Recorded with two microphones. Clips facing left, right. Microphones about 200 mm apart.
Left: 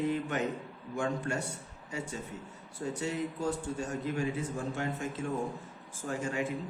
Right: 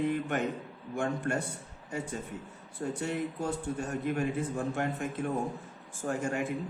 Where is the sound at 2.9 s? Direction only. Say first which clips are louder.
Right 1 dB; 55° right (ahead or behind).